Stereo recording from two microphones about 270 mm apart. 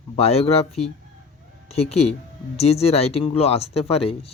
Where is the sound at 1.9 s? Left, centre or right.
Left.